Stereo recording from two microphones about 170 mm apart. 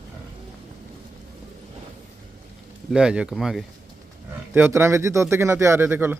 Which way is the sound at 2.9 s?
5° right (ahead or behind).